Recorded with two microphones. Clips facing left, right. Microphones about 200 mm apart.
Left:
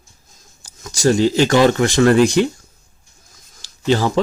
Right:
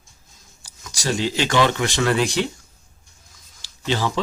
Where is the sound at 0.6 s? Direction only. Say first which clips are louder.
Left 13 dB; 45° left (ahead or behind).